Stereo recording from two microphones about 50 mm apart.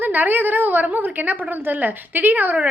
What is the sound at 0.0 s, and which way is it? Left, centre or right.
A woman's voice, right.